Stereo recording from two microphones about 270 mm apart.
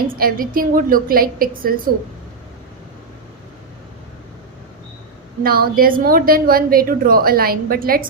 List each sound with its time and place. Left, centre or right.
0.2 s a woman's voice: right
5.4 s a woman's voice: right